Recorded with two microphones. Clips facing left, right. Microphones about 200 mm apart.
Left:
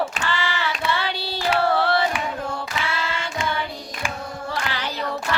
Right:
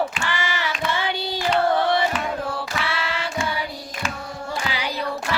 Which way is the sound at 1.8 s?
15° right (ahead or behind).